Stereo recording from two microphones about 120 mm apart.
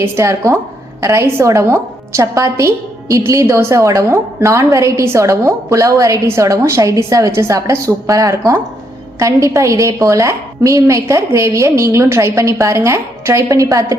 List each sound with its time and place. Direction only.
0.0 s a woman's voice: 25° right (ahead or behind)